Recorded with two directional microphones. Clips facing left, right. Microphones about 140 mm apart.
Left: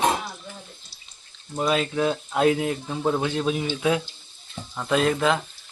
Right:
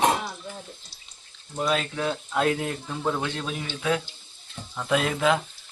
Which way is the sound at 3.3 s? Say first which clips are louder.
Left 7 dB; 10° left (ahead or behind).